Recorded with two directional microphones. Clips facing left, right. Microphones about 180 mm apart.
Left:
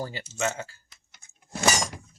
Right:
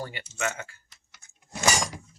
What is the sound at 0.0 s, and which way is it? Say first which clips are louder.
Speech: left 2 dB; 30° left (ahead or behind).